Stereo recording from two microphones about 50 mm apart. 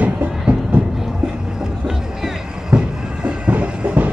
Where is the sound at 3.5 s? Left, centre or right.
Right.